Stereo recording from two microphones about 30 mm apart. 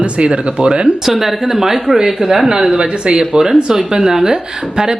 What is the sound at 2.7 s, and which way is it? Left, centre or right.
Speech, right.